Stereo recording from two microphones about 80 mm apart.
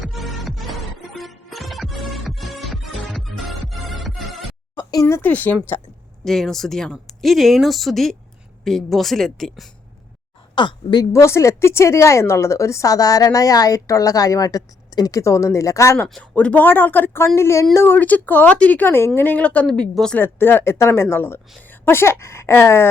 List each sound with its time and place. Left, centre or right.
0.0 s music: centre
4.8 s a sound: left
5.2 s speech: left
6.2 s speech: centre
10.5 s speech: left
11.1 s speech: left
16.3 s speech: centre
20.1 s a woman's voice: left